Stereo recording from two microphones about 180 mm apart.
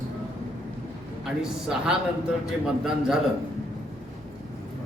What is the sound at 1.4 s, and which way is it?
Speech, 5° right (ahead or behind).